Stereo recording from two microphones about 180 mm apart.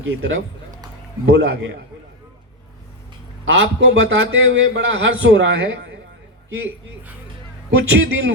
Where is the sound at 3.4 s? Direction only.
85° right.